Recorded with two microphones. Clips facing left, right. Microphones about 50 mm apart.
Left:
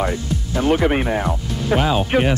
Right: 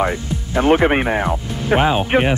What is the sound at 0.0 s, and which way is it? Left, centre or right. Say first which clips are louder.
Speech: right 2 dB; right.